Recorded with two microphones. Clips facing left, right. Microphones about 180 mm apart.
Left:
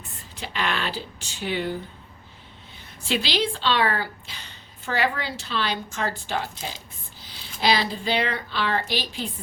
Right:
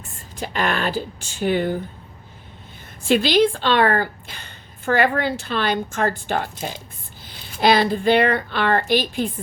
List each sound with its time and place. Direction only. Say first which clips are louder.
0.3 s a woman's voice: right 5 dB; 45° right (ahead or behind)
3.1 s a woman's voice: right 9 dB; 50° right (ahead or behind)